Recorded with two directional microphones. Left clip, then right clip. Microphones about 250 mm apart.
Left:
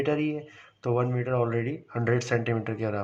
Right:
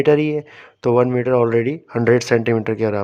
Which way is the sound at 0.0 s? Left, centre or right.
Right.